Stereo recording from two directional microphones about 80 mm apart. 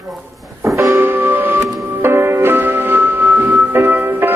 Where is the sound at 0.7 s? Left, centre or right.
Right.